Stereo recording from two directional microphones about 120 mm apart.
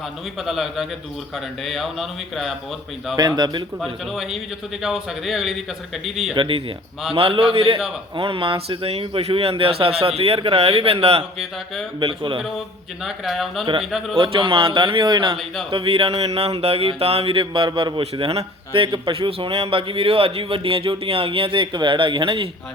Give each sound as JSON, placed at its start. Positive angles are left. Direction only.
{"t": 0.4, "sound": "speech", "side_deg": 0}
{"t": 3.2, "sound": "a man's voice", "side_deg": -35}
{"t": 3.8, "sound": "speech", "side_deg": 0}
{"t": 6.3, "sound": "speech", "side_deg": -45}
{"t": 13.1, "sound": "speech", "side_deg": 0}
{"t": 14.2, "sound": "speech", "side_deg": -45}
{"t": 18.0, "sound": "speech", "side_deg": -60}